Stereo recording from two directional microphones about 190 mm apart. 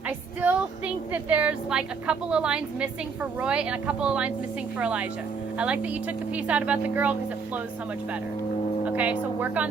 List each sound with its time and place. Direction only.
1.1 s a woman's voice: 10° right (ahead or behind)
8.8 s speech: 5° right (ahead or behind)